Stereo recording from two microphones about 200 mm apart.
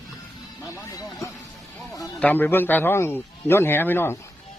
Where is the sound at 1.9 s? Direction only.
15° left (ahead or behind).